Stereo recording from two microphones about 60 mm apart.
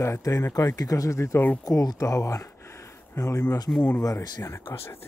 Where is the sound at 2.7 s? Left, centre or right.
Left.